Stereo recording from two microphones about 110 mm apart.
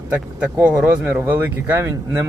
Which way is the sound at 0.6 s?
15° right (ahead or behind).